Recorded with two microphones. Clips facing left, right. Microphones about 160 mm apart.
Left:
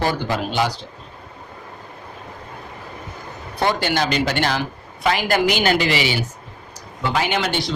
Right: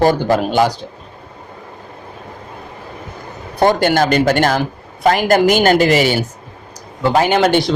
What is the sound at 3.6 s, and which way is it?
Speech, 45° right (ahead or behind).